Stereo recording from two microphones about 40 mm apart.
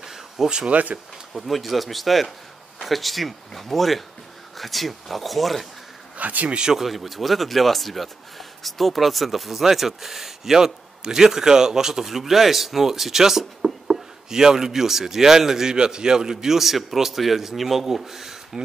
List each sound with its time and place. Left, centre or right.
0.0 s a sound: centre
0.7 s speech: right
1.3 s speech: centre
6.1 s a man's voice: right
6.7 s a man's voice: centre